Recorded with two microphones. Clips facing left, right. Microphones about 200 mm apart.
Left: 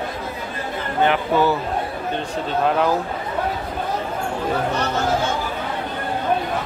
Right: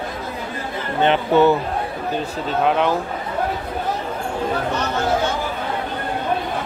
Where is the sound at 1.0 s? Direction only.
25° right (ahead or behind).